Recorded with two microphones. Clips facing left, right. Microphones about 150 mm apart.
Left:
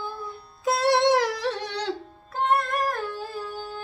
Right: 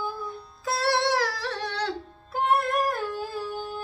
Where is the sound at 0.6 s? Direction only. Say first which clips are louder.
Left 5 dB; 20° left (ahead or behind).